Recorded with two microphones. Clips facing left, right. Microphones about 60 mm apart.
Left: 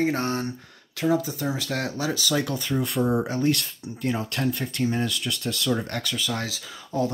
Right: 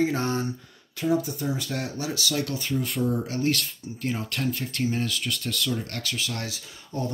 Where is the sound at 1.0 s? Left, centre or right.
Left.